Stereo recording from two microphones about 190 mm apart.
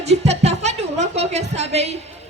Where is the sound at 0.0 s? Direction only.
35° right (ahead or behind).